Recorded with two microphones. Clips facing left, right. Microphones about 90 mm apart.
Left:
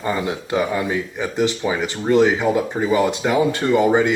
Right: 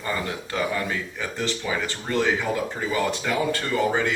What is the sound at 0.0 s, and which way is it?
Speech, 20° left (ahead or behind).